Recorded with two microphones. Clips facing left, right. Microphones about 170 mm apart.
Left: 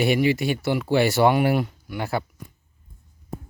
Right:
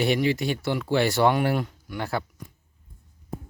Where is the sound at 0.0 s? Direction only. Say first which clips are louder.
Left 3 dB; 5° left (ahead or behind).